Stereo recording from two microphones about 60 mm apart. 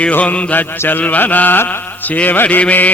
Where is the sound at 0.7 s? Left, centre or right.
Left.